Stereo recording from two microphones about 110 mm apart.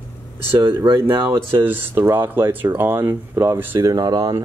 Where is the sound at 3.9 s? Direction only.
40° right (ahead or behind).